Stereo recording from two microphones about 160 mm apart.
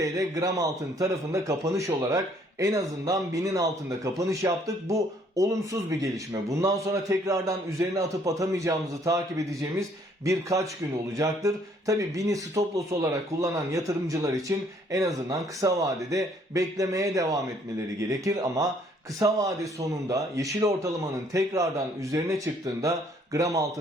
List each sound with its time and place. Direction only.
0.0 s speech: 20° right (ahead or behind)
11.2 s speech: 20° right (ahead or behind)